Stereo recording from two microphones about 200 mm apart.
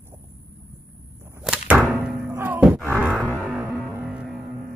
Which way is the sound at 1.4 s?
5° right (ahead or behind).